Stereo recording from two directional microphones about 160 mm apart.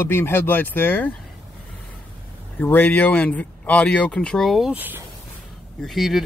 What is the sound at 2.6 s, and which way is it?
Speech, 10° left (ahead or behind).